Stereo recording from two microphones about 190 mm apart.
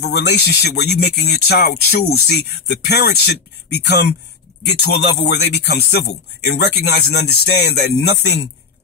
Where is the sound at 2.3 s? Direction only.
60° left (ahead or behind).